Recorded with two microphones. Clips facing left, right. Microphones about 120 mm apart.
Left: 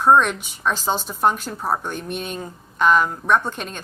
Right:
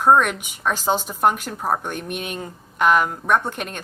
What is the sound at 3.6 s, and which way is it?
Speech, 55° right (ahead or behind).